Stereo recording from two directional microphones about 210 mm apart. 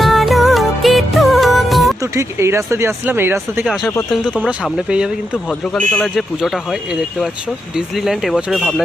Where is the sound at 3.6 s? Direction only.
Centre (ahead or behind).